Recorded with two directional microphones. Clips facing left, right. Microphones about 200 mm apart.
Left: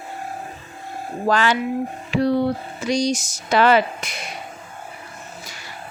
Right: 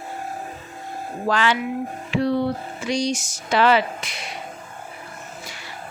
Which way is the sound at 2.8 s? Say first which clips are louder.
Left 3 dB; 40° left (ahead or behind).